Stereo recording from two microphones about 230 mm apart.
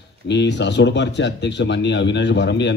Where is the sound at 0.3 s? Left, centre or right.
Left.